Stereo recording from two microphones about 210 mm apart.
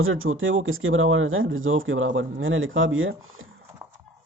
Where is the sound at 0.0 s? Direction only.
75° right (ahead or behind).